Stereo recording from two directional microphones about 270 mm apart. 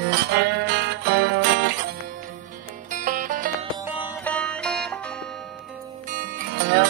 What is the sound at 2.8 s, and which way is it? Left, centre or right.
Music, right.